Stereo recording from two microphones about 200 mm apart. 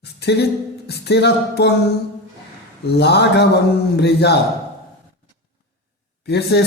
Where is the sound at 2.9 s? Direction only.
55° left (ahead or behind).